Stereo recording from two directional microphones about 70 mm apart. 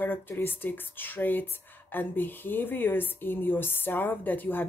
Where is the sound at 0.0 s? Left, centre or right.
Left.